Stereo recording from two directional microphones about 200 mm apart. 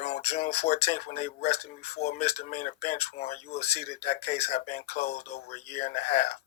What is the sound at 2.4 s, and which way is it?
Speech, 35° left (ahead or behind).